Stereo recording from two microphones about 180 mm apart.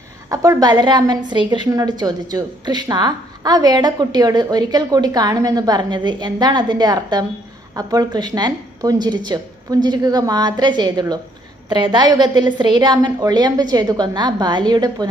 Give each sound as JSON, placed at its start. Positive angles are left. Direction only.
{"t": 0.3, "sound": "a woman's voice", "side_deg": -20}